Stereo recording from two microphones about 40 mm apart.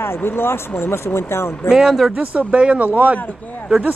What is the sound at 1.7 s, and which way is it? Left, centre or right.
Speech, centre.